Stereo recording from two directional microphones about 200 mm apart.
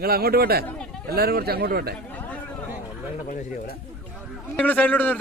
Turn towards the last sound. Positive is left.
turn(degrees=10)  # may be behind; listen again after turning